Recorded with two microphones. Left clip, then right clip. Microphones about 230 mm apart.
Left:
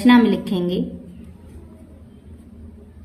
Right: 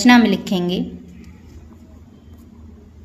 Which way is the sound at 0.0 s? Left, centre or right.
Right.